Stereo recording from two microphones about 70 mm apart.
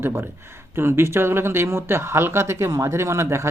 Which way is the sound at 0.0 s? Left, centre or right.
Right.